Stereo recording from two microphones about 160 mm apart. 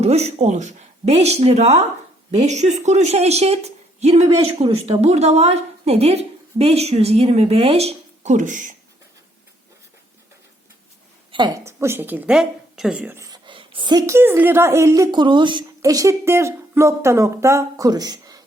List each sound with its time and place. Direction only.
0.0 s a woman's voice: 40° right (ahead or behind)
11.3 s a woman's voice: 30° right (ahead or behind)
14.1 s a woman's voice: 15° right (ahead or behind)